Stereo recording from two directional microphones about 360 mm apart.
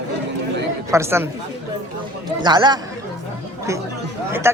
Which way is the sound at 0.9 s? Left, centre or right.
Centre.